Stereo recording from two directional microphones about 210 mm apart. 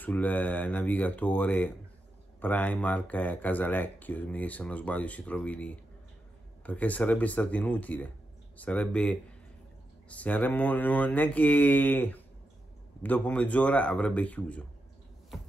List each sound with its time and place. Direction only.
0.0 s speech: 10° left (ahead or behind)